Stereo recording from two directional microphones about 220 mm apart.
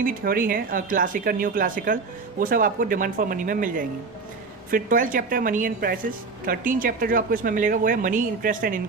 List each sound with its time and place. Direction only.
0.0 s a woman's voice: 40° right (ahead or behind)